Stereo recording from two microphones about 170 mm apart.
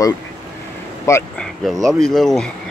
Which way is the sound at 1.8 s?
Centre (ahead or behind).